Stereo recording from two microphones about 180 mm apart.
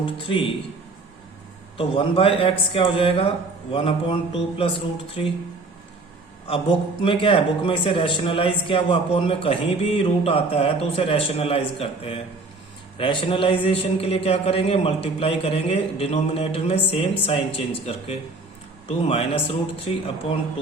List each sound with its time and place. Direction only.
0.0 s a man's voice: 30° left (ahead or behind)
1.8 s a man's voice: 30° left (ahead or behind)
7.0 s a man's voice: 30° left (ahead or behind)